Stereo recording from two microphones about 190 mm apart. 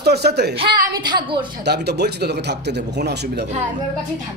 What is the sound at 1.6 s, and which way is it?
Speech, 60° right (ahead or behind).